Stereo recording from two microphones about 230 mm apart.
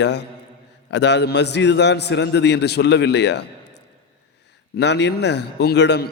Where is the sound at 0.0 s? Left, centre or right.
Left.